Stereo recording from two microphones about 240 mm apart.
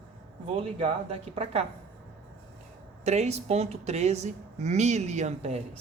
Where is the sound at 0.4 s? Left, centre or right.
Right.